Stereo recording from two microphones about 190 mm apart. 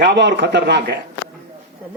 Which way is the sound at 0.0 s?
65° right (ahead or behind).